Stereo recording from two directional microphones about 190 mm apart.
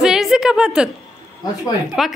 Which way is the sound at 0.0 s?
5° right (ahead or behind).